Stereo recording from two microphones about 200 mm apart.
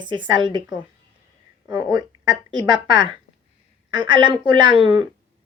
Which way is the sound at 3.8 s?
25° right (ahead or behind).